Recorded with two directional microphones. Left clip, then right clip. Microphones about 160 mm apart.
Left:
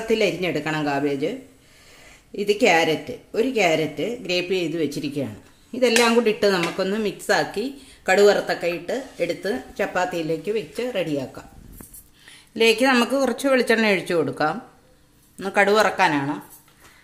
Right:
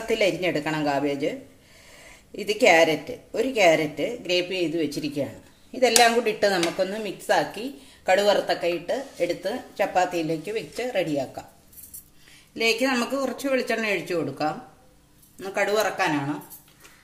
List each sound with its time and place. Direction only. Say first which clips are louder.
0.1 s speech: left 1 dB; 65° left (ahead or behind)
2.3 s speech: even; 65° left (ahead or behind)
12.5 s speech: left 6 dB; 70° left (ahead or behind)